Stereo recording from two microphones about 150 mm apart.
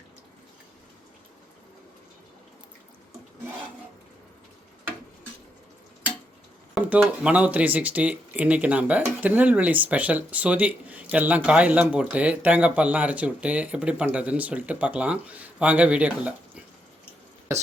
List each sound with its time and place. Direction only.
6.7 s speech: 10° right (ahead or behind)